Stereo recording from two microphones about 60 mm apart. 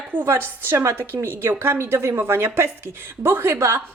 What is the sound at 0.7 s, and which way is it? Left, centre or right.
A woman's voice, right.